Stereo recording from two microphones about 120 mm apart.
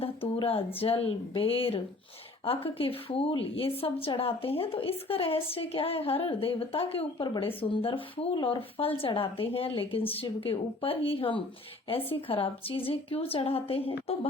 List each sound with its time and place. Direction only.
0.3 s a woman's voice: 55° left (ahead or behind)